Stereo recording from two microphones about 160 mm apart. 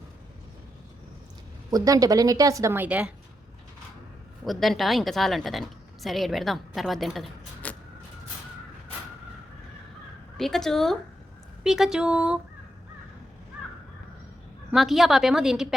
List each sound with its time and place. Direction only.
1.7 s a woman's voice: 20° right (ahead or behind)
4.4 s a woman's voice: centre (ahead or behind)
10.3 s a woman's voice: centre (ahead or behind)
14.7 s a woman's voice: centre (ahead or behind)